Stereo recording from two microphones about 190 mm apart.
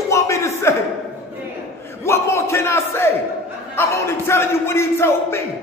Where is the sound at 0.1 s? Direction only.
15° left (ahead or behind).